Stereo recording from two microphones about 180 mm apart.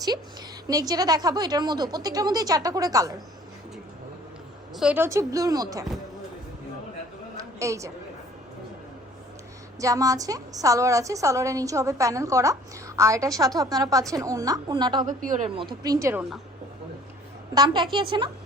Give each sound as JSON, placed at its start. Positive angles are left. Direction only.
{"t": 0.7, "sound": "a woman's voice", "side_deg": -20}
{"t": 4.7, "sound": "a woman's voice", "side_deg": -5}
{"t": 7.3, "sound": "a sound", "side_deg": -15}
{"t": 9.8, "sound": "a woman's voice", "side_deg": -20}
{"t": 15.0, "sound": "speech", "side_deg": -45}
{"t": 15.4, "sound": "a woman's voice", "side_deg": -30}
{"t": 17.5, "sound": "a woman's voice", "side_deg": -20}